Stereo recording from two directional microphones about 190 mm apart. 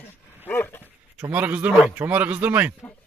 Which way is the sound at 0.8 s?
10° right (ahead or behind).